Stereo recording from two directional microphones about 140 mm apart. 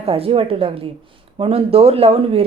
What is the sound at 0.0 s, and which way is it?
A woman's voice, 45° right (ahead or behind).